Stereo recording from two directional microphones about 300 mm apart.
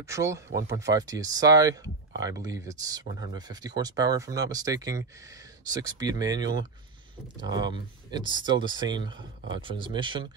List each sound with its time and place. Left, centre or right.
0.0 s speech: centre